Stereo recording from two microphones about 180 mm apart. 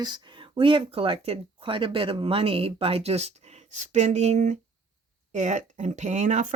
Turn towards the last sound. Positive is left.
turn(degrees=-40)  # may be behind; listen again after turning